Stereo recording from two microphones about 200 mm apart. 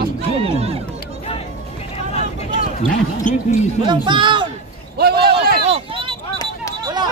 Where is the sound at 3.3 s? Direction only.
40° left (ahead or behind).